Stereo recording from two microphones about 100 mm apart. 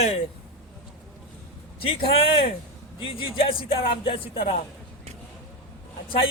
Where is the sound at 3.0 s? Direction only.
65° left (ahead or behind).